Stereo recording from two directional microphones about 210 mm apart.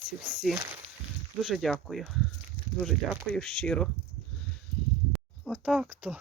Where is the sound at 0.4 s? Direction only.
5° right (ahead or behind).